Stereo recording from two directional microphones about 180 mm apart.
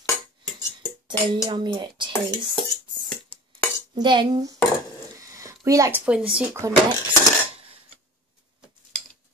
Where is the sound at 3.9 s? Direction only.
25° right (ahead or behind).